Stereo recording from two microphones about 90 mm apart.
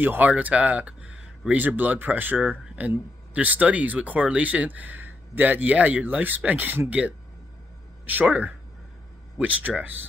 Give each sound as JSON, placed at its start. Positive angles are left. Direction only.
{"t": 0.0, "sound": "speech", "side_deg": -20}